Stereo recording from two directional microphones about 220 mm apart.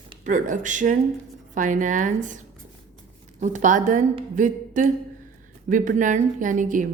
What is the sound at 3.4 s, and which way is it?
Speech, 35° right (ahead or behind).